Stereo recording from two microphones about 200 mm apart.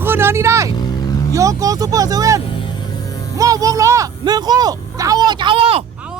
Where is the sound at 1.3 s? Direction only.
15° right (ahead or behind).